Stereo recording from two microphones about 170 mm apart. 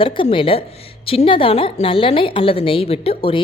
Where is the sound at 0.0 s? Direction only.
30° left (ahead or behind).